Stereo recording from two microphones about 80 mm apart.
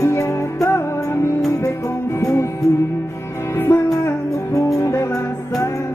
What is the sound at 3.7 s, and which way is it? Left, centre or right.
Music, left.